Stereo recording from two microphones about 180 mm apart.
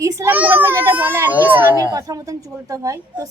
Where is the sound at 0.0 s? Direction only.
15° right (ahead or behind).